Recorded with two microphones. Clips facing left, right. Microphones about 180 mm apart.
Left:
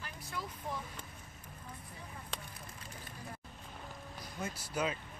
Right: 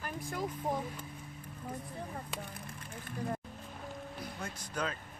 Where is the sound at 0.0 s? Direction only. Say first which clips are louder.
Right 7 dB; 50° right (ahead or behind).